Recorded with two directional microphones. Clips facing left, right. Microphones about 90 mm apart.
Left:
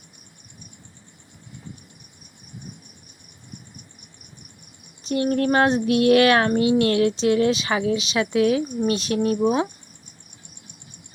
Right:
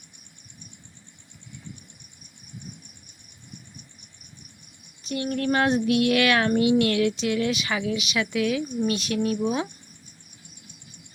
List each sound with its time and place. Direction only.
5.0 s child singing: 35° left (ahead or behind)